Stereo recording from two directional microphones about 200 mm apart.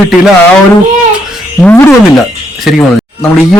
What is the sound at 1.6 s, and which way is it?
Speech, 10° left (ahead or behind).